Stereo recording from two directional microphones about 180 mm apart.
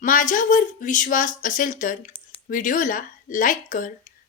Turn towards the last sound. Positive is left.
turn(degrees=45)  # may be behind; listen again after turning